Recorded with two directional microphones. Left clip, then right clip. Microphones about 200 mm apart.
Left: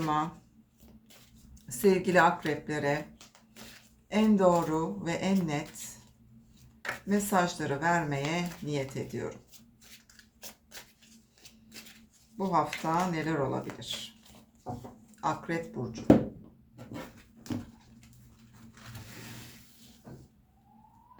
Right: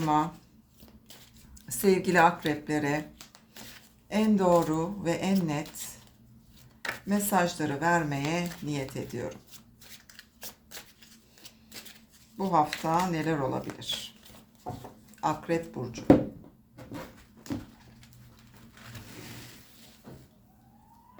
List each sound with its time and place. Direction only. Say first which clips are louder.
1.8 s speech: right 1 dB; 30° right (ahead or behind)
6.8 s speech: even; 25° right (ahead or behind)
12.4 s speech: right 3 dB; 25° right (ahead or behind)
15.2 s speech: right 3 dB; 25° right (ahead or behind)